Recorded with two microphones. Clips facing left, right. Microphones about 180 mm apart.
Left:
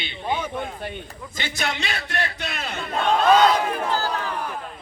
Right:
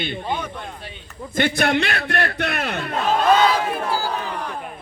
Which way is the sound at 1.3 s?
55° right (ahead or behind).